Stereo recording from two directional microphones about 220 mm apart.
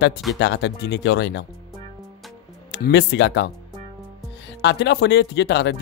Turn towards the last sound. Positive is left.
turn(degrees=50)  # may be behind; listen again after turning